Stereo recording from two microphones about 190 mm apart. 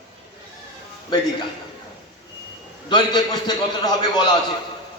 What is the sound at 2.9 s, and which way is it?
Speech, 20° left (ahead or behind).